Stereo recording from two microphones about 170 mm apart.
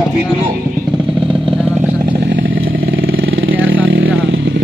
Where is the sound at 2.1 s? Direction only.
90° right.